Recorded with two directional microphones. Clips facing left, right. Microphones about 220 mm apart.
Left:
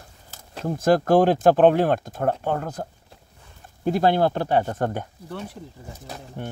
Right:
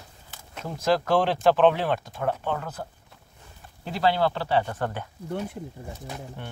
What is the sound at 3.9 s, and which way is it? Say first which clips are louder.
Speech: left 4 dB; 50° left (ahead or behind).